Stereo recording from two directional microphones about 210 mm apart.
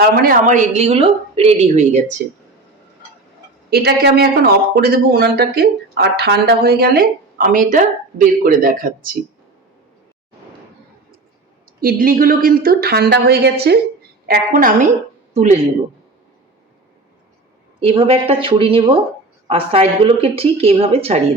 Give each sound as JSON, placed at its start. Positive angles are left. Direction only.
{"t": 0.3, "sound": "a woman's voice", "side_deg": -35}
{"t": 3.7, "sound": "speech", "side_deg": -50}
{"t": 11.8, "sound": "a woman's voice", "side_deg": -40}
{"t": 17.7, "sound": "speech", "side_deg": -25}